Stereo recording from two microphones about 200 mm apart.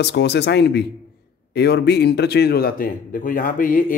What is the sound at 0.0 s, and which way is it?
A man's voice, 60° left (ahead or behind).